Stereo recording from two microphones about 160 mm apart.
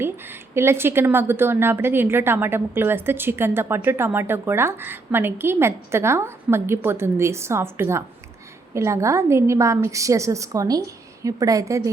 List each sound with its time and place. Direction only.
0.0 s a woman's voice: 15° right (ahead or behind)